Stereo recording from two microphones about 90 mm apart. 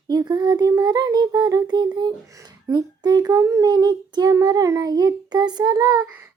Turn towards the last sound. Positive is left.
turn(degrees=-45)  # may be behind; listen again after turning